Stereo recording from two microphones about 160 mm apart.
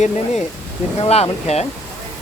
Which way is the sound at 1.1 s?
40° left (ahead or behind).